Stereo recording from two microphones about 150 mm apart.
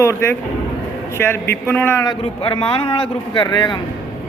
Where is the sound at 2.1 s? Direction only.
35° left (ahead or behind).